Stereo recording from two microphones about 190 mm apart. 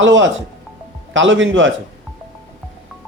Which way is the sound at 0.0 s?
75° right (ahead or behind).